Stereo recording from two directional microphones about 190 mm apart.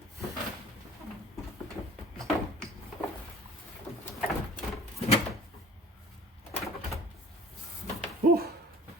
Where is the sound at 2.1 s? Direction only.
Centre (ahead or behind).